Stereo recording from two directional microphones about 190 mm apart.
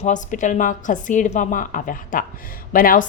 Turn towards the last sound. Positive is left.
turn(degrees=45)  # may be behind; listen again after turning